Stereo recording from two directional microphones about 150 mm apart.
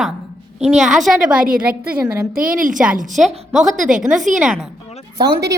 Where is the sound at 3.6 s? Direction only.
55° right (ahead or behind).